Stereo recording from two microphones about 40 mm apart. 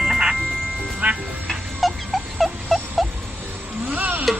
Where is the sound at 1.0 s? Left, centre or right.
Right.